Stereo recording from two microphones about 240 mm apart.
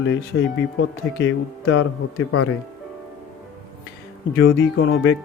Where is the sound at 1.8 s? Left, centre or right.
Left.